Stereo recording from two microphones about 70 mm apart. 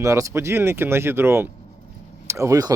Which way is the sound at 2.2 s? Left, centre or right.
Right.